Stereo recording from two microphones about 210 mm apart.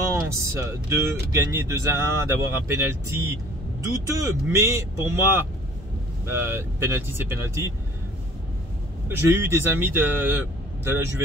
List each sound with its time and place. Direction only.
0.1 s speech: 15° right (ahead or behind)
9.1 s speech: 10° right (ahead or behind)